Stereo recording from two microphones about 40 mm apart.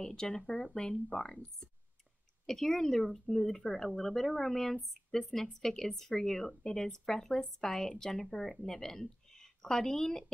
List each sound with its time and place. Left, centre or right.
0.0 s speech: left
2.4 s speech: centre